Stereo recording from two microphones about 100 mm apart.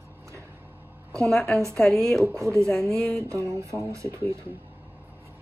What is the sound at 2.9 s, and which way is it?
Speech, 5° left (ahead or behind).